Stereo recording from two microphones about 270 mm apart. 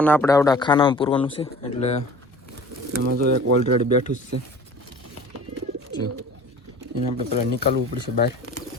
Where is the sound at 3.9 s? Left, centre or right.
Left.